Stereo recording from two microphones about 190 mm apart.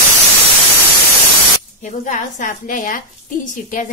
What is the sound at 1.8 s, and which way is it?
Speech, 40° left (ahead or behind).